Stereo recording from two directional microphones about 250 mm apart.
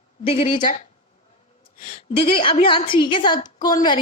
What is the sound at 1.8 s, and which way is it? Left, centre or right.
Speech, left.